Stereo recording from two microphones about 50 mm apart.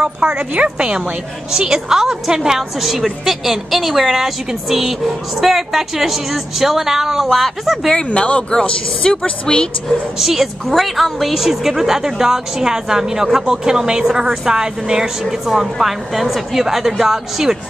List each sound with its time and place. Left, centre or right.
0.2 s a woman's voice: centre
7.2 s a woman's voice: centre
8.1 s a woman's voice: left
10.1 s a woman's voice: centre
15.2 s a woman's voice: centre